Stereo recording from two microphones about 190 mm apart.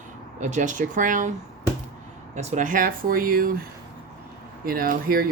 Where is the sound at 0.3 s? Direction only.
40° right (ahead or behind).